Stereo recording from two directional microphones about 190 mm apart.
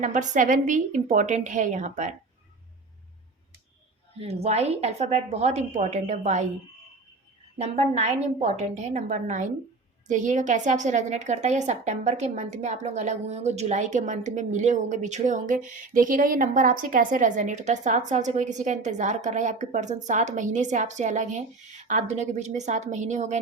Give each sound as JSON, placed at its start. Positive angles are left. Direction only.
{"t": 0.0, "sound": "a woman's voice", "side_deg": -40}
{"t": 4.2, "sound": "a woman's voice", "side_deg": -35}
{"t": 7.6, "sound": "a woman's voice", "side_deg": -35}